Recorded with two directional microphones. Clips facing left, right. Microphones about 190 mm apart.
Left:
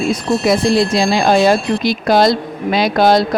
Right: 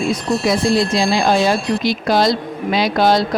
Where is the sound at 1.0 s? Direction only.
55° left (ahead or behind).